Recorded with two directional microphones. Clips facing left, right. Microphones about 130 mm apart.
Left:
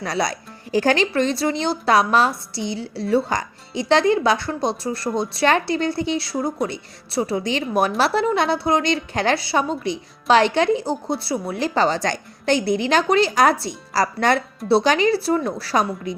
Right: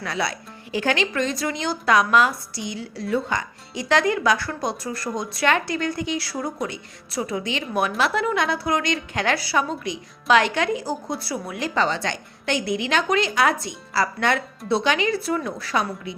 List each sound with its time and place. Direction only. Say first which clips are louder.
0.0 s a woman's voice: left 3 dB; 40° left (ahead or behind)